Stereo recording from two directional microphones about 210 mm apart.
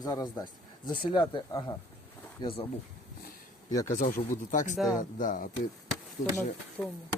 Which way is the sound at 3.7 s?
15° left (ahead or behind).